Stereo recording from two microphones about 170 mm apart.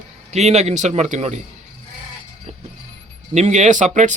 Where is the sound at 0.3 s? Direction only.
40° right (ahead or behind).